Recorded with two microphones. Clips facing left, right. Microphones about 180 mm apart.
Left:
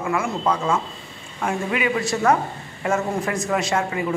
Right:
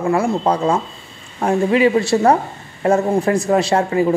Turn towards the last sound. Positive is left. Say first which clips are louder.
# right 7 dB
turn(degrees=-35)  # may be behind; listen again after turning